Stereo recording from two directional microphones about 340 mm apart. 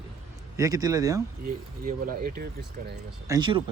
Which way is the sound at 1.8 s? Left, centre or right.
Right.